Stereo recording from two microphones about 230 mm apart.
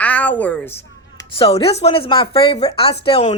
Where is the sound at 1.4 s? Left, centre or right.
Left.